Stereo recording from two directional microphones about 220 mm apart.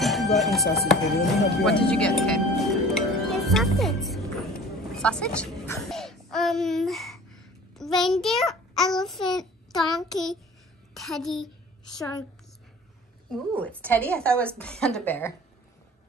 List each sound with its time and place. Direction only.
0.0 s chopping: centre (ahead or behind)
0.8 s speech: centre (ahead or behind)
2.9 s music: centre (ahead or behind)
4.9 s a child's voice: 5° left (ahead or behind)
11.9 s a woman's voice: 15° left (ahead or behind)
13.3 s speech: 5° left (ahead or behind)